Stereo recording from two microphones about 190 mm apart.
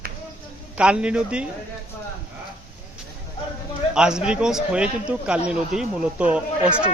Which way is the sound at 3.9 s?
5° right (ahead or behind).